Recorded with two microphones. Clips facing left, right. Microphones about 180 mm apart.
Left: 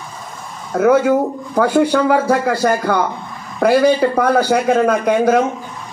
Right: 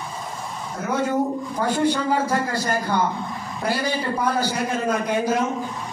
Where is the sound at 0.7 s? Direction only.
75° left (ahead or behind).